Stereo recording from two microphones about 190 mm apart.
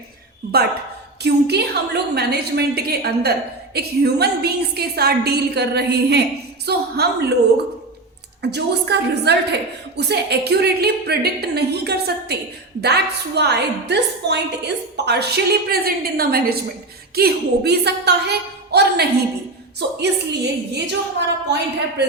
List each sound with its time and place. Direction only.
1.2 s a woman's voice: 60° right (ahead or behind)